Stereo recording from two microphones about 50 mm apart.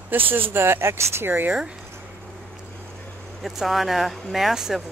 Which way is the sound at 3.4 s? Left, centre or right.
Centre.